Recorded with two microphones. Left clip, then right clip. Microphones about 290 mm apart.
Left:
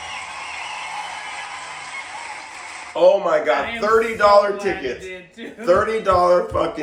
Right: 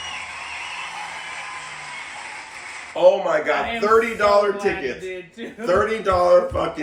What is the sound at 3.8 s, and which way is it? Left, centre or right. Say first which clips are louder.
Speech: left 1 dB; centre.